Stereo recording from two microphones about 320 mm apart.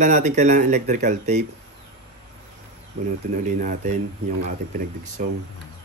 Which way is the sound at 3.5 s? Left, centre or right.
Right.